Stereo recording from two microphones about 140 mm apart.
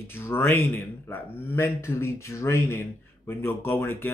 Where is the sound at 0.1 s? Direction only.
15° left (ahead or behind).